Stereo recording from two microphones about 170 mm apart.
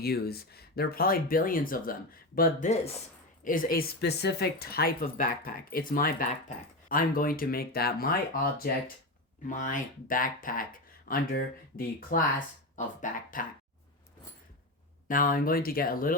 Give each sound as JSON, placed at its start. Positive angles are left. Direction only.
{"t": 0.0, "sound": "speech", "side_deg": 65}
{"t": 9.5, "sound": "speech", "side_deg": 50}
{"t": 15.0, "sound": "speech", "side_deg": 55}